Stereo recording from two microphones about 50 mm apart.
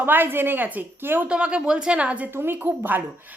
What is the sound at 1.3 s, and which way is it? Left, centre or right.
A woman's voice, centre.